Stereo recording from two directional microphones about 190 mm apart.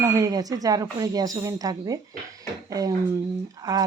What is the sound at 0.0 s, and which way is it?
Speech, 20° right (ahead or behind).